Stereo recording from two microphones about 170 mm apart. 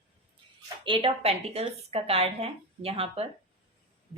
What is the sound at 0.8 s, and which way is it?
Speech, 30° right (ahead or behind).